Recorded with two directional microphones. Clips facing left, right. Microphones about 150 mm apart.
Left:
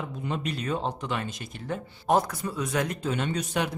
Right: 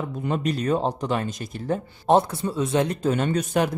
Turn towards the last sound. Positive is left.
turn(degrees=-45)  # may be behind; listen again after turning